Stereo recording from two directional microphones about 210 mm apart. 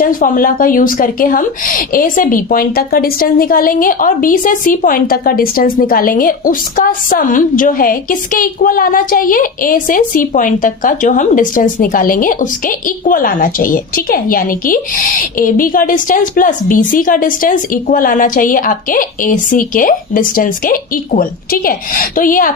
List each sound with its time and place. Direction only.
0.0 s a woman's voice: 40° left (ahead or behind)